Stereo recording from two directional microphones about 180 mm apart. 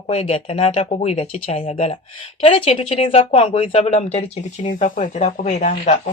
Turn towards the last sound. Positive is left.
turn(degrees=40)  # may be behind; listen again after turning